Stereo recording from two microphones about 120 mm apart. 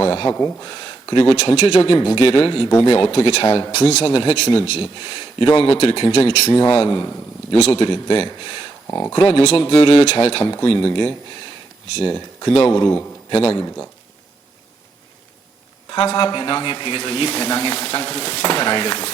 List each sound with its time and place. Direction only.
0.0 s speech: 50° left (ahead or behind)
9.3 s speech: 60° left (ahead or behind)
15.9 s speech: 45° left (ahead or behind)